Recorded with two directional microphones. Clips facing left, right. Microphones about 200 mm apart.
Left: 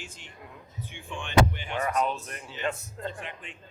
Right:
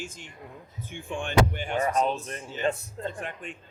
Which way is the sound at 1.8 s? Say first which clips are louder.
Right 2 dB; 25° right (ahead or behind).